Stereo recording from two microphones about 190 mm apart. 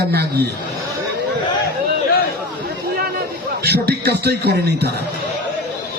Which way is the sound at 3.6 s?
55° right (ahead or behind).